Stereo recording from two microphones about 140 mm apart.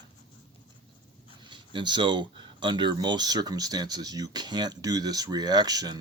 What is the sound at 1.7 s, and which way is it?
Speech, 35° right (ahead or behind).